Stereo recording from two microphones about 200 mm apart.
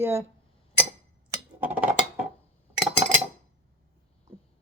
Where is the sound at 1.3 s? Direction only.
10° right (ahead or behind).